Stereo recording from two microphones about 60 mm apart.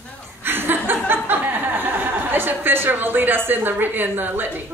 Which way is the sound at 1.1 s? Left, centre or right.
Right.